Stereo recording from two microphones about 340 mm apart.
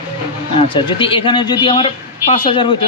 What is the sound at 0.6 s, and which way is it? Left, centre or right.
A man's voice, centre.